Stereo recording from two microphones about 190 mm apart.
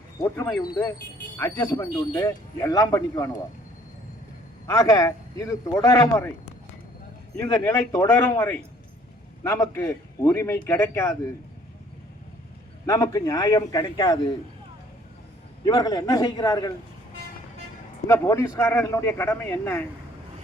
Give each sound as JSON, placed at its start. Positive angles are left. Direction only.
{"t": 0.2, "sound": "speech", "side_deg": 15}
{"t": 4.6, "sound": "speech", "side_deg": 15}
{"t": 7.3, "sound": "speech", "side_deg": 15}
{"t": 12.8, "sound": "a man's voice", "side_deg": 15}
{"t": 15.6, "sound": "a man's voice", "side_deg": 20}
{"t": 18.1, "sound": "speech", "side_deg": 15}